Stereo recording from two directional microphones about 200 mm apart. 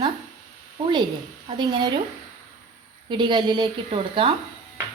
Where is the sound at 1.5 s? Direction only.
25° right (ahead or behind).